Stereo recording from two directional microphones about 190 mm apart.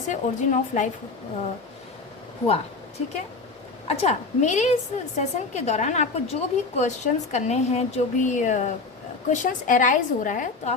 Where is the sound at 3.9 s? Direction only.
35° left (ahead or behind).